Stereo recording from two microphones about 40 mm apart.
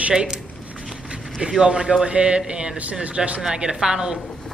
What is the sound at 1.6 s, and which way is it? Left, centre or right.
A man's voice, centre.